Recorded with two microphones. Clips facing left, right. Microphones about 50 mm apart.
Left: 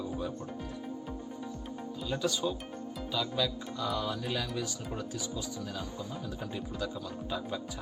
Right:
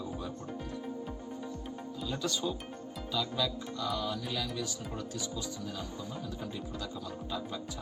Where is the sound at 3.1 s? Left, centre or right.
Centre.